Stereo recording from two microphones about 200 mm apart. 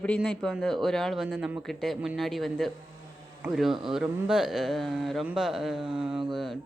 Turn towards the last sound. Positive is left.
turn(degrees=0)  # may be behind; listen again after turning